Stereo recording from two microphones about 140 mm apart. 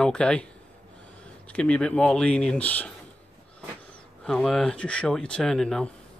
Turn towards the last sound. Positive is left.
turn(degrees=5)  # may be behind; listen again after turning